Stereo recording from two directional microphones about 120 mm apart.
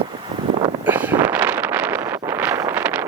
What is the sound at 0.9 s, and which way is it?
Wind noise, 15° right (ahead or behind).